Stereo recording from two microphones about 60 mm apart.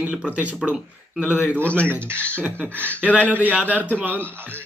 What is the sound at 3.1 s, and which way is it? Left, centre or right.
Speech, left.